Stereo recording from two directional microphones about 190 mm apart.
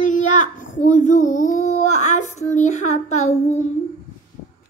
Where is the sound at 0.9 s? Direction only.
40° left (ahead or behind).